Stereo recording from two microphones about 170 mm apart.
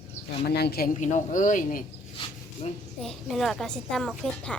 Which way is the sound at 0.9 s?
50° left (ahead or behind).